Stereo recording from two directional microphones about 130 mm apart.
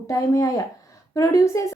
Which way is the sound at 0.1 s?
25° left (ahead or behind).